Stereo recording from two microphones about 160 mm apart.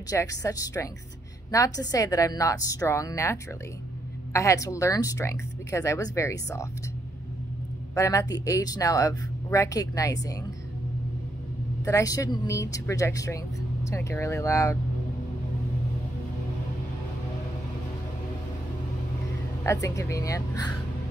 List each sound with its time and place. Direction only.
0.1 s speech: 20° left (ahead or behind)
7.9 s speech: 20° left (ahead or behind)
11.8 s speech: 20° left (ahead or behind)
19.6 s speech: 20° left (ahead or behind)